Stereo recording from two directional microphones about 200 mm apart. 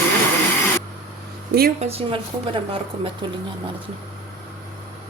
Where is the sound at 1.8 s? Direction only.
30° right (ahead or behind).